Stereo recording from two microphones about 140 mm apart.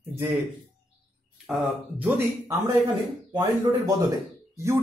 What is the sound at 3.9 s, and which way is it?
Speech, 20° right (ahead or behind).